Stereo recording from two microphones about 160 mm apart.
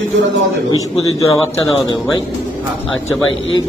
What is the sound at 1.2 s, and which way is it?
A man's voice, 20° left (ahead or behind).